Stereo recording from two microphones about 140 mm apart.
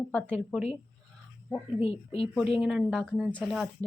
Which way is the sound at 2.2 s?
Centre (ahead or behind).